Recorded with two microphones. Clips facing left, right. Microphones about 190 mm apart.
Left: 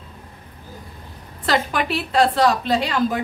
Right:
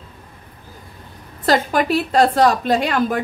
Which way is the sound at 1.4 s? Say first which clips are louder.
Right 4 dB; 40° right (ahead or behind).